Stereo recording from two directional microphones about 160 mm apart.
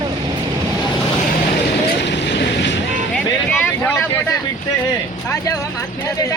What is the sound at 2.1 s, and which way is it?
Vehicle, 90° left.